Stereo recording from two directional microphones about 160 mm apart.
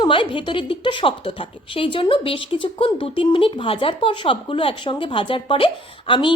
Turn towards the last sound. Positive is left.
turn(degrees=30)  # may be behind; listen again after turning